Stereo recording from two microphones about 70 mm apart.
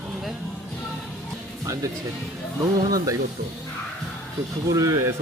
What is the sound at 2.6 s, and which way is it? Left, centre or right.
Speech, right.